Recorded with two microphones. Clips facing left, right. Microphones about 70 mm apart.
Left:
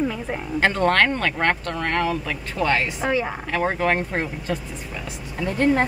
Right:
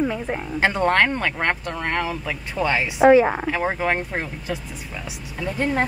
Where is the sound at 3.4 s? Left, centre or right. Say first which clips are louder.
Left 1 dB; centre.